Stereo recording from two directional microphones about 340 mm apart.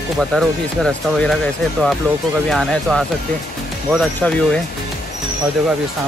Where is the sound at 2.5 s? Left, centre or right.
Centre.